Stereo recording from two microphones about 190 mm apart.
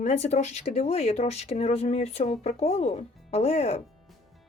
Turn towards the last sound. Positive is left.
turn(degrees=35)  # may be behind; listen again after turning